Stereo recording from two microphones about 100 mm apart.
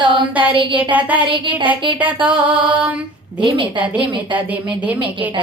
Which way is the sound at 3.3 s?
55° right (ahead or behind).